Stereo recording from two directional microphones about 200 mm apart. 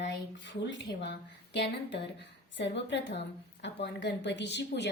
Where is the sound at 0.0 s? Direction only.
65° left (ahead or behind).